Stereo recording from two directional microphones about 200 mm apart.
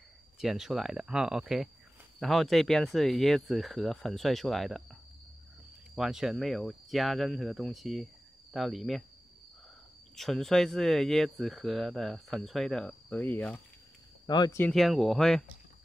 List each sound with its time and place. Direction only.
0.4 s speech: centre (ahead or behind)
5.9 s speech: 5° right (ahead or behind)
10.1 s speech: centre (ahead or behind)
14.2 s speech: 20° left (ahead or behind)
14.6 s speech: centre (ahead or behind)